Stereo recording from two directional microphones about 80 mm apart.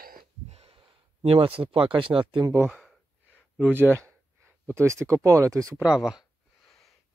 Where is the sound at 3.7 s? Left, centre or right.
Right.